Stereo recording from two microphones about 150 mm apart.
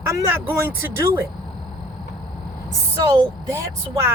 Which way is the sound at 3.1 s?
20° right (ahead or behind).